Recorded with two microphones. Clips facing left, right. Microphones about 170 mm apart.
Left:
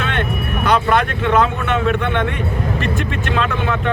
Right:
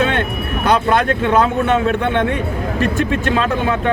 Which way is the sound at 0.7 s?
40° right (ahead or behind).